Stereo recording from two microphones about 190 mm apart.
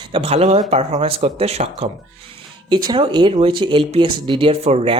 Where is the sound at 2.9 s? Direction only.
25° right (ahead or behind).